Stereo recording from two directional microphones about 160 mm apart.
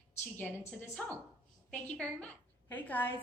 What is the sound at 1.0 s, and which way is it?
A woman's voice, 10° left (ahead or behind).